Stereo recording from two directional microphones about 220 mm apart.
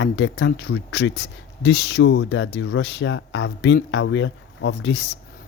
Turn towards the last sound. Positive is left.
turn(degrees=55)  # may be behind; listen again after turning